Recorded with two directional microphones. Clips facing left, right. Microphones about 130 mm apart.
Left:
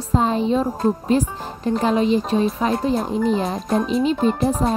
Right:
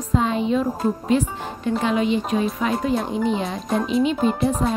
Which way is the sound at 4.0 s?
35° left (ahead or behind).